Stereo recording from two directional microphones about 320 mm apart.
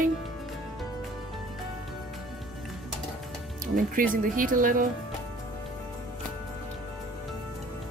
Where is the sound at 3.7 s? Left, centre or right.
Right.